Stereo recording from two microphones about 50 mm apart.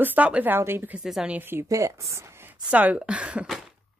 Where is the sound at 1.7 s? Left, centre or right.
Right.